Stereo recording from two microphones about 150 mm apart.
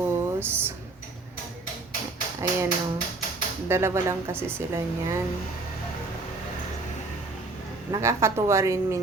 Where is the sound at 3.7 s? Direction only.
15° right (ahead or behind).